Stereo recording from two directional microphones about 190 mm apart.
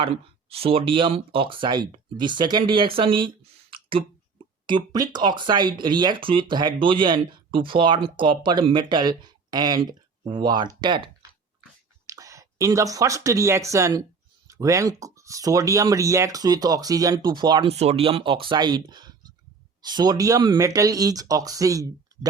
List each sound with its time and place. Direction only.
0.5 s speech: 30° right (ahead or behind)
17.7 s speech: 35° right (ahead or behind); by 22.3 s 20° right (ahead or behind)